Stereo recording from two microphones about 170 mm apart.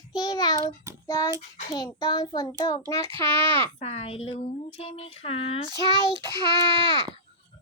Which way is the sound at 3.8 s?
35° left (ahead or behind).